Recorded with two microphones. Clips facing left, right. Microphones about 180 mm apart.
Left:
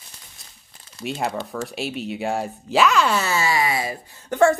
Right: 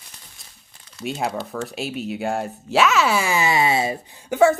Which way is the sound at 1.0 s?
Centre (ahead or behind).